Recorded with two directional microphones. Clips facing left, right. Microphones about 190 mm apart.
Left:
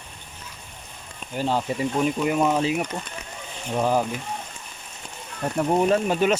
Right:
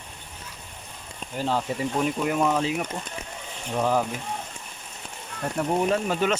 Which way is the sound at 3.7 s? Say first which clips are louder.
Left 2 dB; 5° left (ahead or behind).